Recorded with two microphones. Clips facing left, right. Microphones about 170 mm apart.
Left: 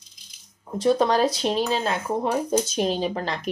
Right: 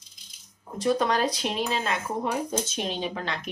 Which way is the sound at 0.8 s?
30° left (ahead or behind).